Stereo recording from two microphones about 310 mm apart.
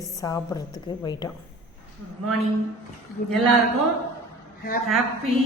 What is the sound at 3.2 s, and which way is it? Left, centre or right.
Speech, left.